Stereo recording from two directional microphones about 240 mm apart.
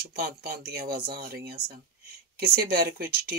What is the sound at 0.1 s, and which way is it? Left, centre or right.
Speech, right.